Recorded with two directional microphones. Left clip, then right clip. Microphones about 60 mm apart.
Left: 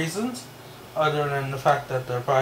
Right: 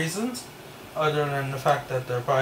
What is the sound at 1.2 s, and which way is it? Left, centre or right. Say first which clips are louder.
Speech: left 1 dB; right.